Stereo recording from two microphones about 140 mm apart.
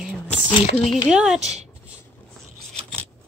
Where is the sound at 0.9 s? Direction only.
5° right (ahead or behind).